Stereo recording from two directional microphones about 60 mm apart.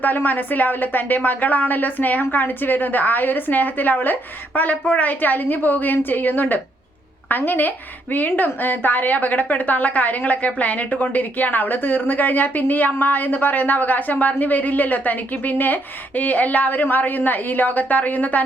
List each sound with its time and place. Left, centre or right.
0.0 s a woman's voice: left